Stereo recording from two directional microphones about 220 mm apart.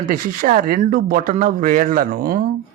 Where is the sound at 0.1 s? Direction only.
40° right (ahead or behind).